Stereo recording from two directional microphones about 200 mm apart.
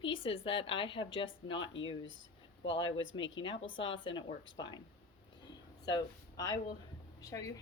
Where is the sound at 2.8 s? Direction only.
25° left (ahead or behind).